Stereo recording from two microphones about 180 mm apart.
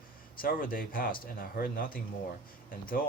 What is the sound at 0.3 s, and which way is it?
Speech, 50° left (ahead or behind).